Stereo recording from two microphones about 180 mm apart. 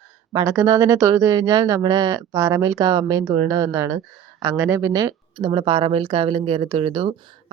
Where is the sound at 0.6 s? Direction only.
15° right (ahead or behind).